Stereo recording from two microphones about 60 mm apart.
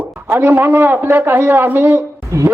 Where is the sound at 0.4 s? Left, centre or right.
Right.